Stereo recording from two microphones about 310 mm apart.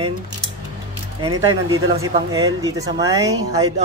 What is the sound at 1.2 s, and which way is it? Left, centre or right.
Speech, centre.